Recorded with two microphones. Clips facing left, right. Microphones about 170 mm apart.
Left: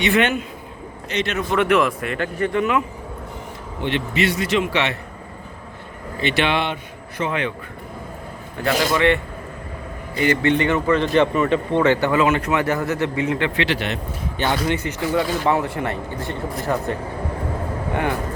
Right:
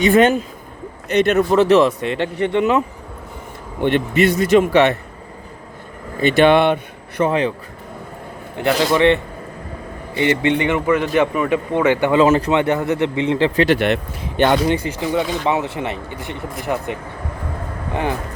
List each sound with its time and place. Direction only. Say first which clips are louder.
0.0 s a man's voice: right 6 dB; 40° right (ahead or behind)
1.2 s a man's voice: right 9 dB; 50° right (ahead or behind)
1.5 s speech: right 5 dB; 30° right (ahead or behind)
3.8 s a man's voice: right 6 dB; 50° right (ahead or behind)
6.1 s a man's voice: right 8 dB; 45° right (ahead or behind)
7.3 s a man's voice: right 5 dB; 35° right (ahead or behind)
8.6 s speech: right 4 dB; 25° right (ahead or behind)
12.1 s a man's voice: right 5 dB; 35° right (ahead or behind)
12.5 s speech: right 4 dB; 20° right (ahead or behind)
13.6 s speech: right 7 dB; 50° right (ahead or behind)
15.4 s speech: even; 20° right (ahead or behind)